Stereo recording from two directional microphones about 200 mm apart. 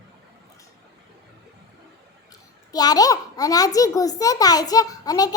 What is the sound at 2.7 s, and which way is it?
A child's voice, 20° left (ahead or behind).